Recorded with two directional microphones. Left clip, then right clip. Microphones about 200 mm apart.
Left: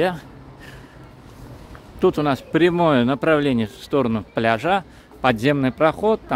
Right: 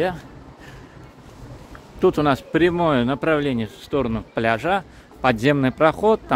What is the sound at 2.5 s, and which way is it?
Speech, 15° left (ahead or behind).